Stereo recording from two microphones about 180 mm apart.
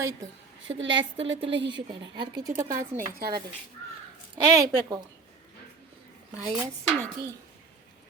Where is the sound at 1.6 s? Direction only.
25° right (ahead or behind).